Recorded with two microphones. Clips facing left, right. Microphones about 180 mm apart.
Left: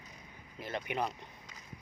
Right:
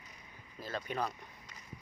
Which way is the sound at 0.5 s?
20° left (ahead or behind).